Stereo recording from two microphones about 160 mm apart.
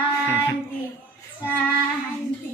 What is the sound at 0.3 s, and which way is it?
Speech, 15° left (ahead or behind).